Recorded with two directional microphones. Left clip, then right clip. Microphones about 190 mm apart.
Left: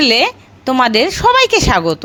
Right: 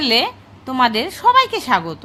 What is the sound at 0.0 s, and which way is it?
A woman's voice, 35° left (ahead or behind).